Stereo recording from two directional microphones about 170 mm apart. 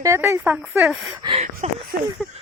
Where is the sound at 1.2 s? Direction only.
35° right (ahead or behind).